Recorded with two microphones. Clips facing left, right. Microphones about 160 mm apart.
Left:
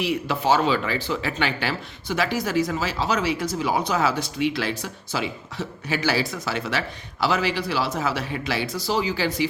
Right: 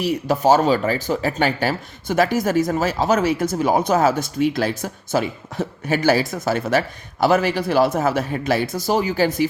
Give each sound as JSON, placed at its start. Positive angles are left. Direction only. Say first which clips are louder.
{"t": 0.0, "sound": "speech", "louder": "right 5 dB", "side_deg": -45}